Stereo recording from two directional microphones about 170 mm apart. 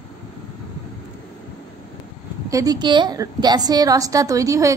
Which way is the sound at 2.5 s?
20° right (ahead or behind).